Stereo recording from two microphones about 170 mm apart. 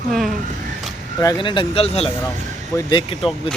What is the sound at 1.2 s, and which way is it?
Speech, 25° left (ahead or behind).